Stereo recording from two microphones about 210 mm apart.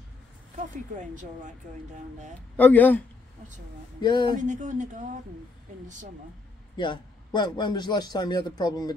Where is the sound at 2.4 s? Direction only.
10° left (ahead or behind).